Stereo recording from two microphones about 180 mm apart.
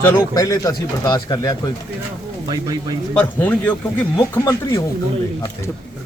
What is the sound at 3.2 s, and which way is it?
A man's voice, 10° left (ahead or behind).